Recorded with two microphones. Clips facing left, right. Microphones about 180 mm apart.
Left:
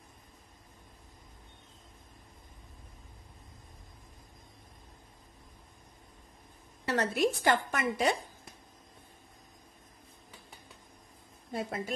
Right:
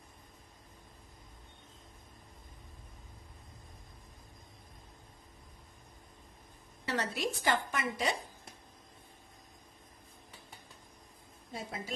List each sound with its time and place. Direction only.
6.9 s a woman's voice: 50° left (ahead or behind)
11.5 s a woman's voice: 60° left (ahead or behind)